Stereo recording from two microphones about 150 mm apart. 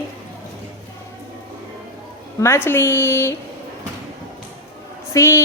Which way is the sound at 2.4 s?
15° left (ahead or behind).